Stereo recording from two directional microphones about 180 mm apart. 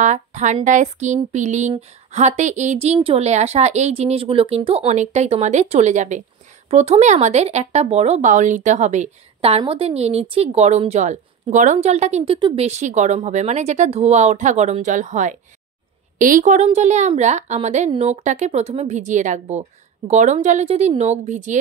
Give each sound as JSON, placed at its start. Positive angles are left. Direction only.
{"t": 0.0, "sound": "a woman's voice", "side_deg": -40}